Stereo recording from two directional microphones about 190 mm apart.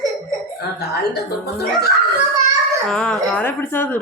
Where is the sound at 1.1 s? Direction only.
55° left (ahead or behind).